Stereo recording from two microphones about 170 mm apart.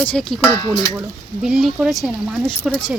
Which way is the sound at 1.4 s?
5° right (ahead or behind).